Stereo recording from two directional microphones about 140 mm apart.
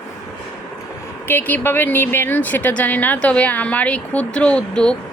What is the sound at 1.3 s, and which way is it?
Speech, 15° left (ahead or behind).